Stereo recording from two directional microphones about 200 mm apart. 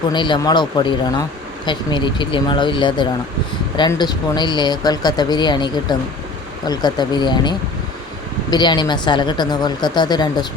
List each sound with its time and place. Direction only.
0.1 s speech: 25° left (ahead or behind)